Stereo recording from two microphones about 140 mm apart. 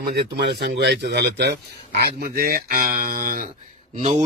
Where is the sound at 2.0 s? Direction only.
90° right.